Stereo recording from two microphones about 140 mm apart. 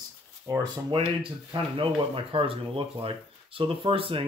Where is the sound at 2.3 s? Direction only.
40° right (ahead or behind).